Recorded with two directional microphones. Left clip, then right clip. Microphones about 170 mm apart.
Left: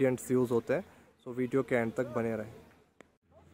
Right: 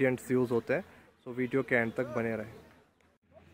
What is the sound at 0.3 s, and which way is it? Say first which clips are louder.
A man's voice: even; 20° left (ahead or behind).